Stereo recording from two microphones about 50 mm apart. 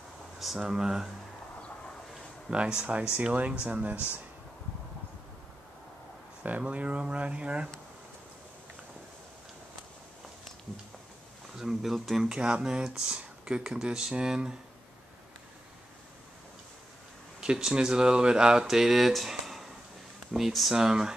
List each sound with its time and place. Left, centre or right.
0.6 s speech: centre
2.5 s speech: right
6.4 s speech: right
11.5 s speech: centre
17.4 s speech: centre